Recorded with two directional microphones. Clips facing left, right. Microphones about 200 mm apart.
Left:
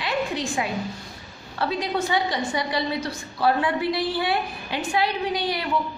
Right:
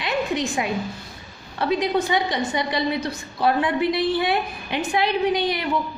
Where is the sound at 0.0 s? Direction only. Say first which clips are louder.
Right 2 dB; 20° right (ahead or behind).